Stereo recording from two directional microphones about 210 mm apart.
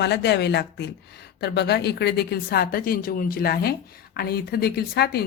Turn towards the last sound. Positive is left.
turn(degrees=50)  # may be behind; listen again after turning